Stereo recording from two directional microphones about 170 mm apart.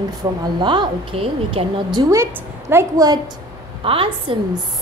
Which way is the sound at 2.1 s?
15° right (ahead or behind).